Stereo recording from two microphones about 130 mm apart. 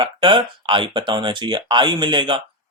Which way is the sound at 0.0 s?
40° right (ahead or behind).